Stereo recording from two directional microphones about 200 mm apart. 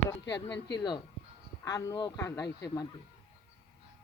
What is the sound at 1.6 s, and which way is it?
Speech, 15° left (ahead or behind).